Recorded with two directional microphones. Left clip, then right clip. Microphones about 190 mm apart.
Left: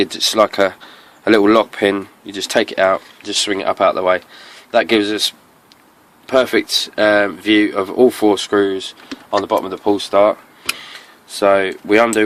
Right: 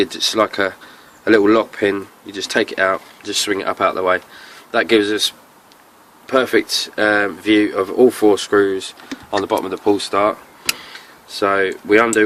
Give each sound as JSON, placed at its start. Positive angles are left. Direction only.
{"t": 0.0, "sound": "speech", "side_deg": 40}